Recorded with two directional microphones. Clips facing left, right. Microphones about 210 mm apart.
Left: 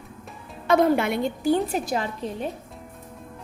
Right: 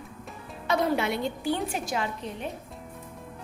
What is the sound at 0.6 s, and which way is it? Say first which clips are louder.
A woman's voice: left 6 dB; 50° left (ahead or behind).